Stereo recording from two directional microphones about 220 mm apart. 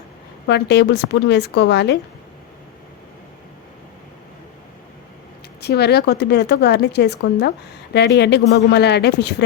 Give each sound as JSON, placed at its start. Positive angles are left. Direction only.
{"t": 0.4, "sound": "speech", "side_deg": 50}
{"t": 5.5, "sound": "speech", "side_deg": 45}